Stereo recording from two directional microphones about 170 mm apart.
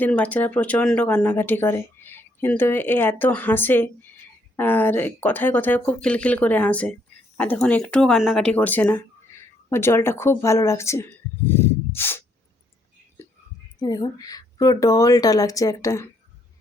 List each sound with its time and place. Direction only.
0.0 s speech: 10° left (ahead or behind)
11.4 s snort: 15° left (ahead or behind)
13.7 s a woman's voice: 25° left (ahead or behind)